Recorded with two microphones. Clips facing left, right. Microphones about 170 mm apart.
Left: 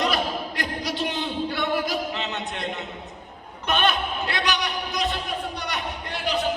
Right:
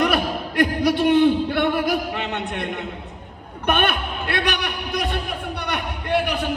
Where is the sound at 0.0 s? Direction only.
60° right (ahead or behind).